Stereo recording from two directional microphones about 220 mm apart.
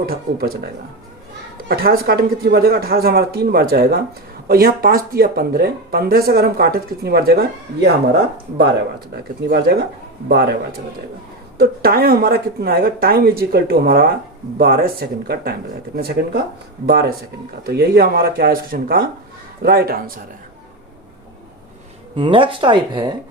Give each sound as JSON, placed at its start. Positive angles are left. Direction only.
{"t": 0.0, "sound": "speech", "side_deg": -45}
{"t": 9.5, "sound": "speech", "side_deg": -45}
{"t": 11.5, "sound": "speech", "side_deg": -45}
{"t": 22.1, "sound": "speech", "side_deg": -25}